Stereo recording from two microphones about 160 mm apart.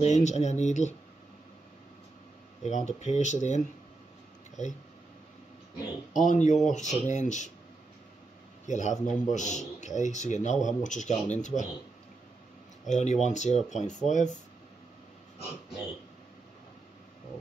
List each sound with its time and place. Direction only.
0.0 s speech: 45° left (ahead or behind)
2.6 s speech: 45° left (ahead or behind)
6.1 s speech: 50° left (ahead or behind)
8.6 s speech: 50° left (ahead or behind)
12.8 s speech: 45° left (ahead or behind)